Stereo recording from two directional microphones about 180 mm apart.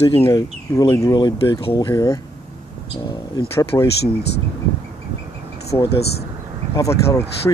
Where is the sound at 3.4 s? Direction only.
15° left (ahead or behind).